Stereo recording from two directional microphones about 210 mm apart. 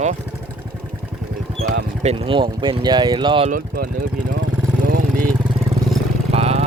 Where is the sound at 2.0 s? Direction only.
25° right (ahead or behind).